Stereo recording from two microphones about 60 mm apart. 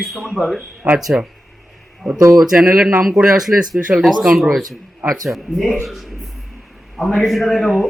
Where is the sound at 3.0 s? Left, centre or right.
Centre.